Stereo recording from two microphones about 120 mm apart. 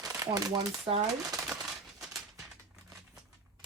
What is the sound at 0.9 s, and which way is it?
Speech, 45° right (ahead or behind).